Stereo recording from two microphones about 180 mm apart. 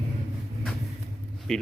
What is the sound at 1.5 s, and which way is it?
Speech, 5° left (ahead or behind).